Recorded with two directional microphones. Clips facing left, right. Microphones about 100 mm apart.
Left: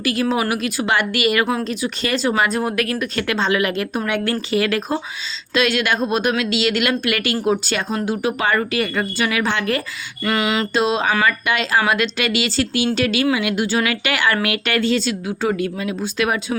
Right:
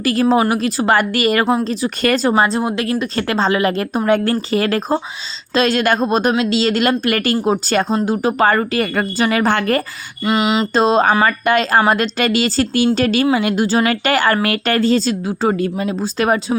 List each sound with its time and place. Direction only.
0.0 s a woman's voice: 40° right (ahead or behind)
10.2 s a sound: 20° right (ahead or behind)
10.8 s a woman's voice: 40° right (ahead or behind)